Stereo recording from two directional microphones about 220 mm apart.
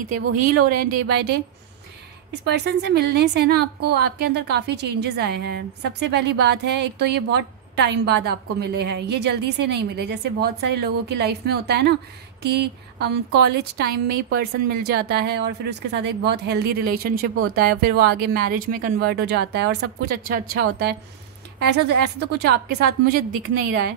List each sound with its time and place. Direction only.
0.7 s a woman's voice: 40° right (ahead or behind)
2.4 s a woman's voice: 50° right (ahead or behind)